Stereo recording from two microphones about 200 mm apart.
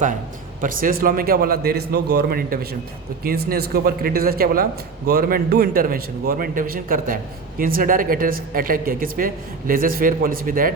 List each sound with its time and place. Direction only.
0.6 s speech: 45° right (ahead or behind)